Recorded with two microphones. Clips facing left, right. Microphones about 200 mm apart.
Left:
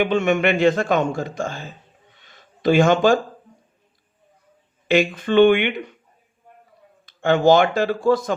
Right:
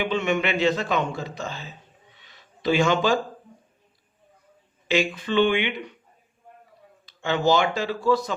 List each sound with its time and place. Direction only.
0.0 s a man's voice: 50° left (ahead or behind)
2.1 s a sound: 50° left (ahead or behind)
4.9 s a man's voice: 50° left (ahead or behind)
7.0 s a man's voice: 50° left (ahead or behind)